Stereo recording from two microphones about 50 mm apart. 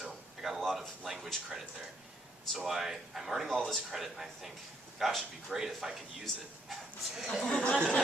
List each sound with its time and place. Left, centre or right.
0.0 s a sound: centre
1.3 s speech: centre
3.8 s speech: centre
7.4 s speech: centre